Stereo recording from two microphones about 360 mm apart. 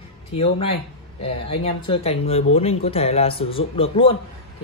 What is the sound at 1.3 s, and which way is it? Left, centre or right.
Speech, centre.